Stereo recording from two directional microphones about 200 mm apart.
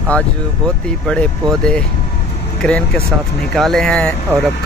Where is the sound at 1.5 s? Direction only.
5° left (ahead or behind).